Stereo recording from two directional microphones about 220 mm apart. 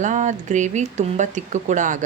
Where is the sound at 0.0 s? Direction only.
35° right (ahead or behind).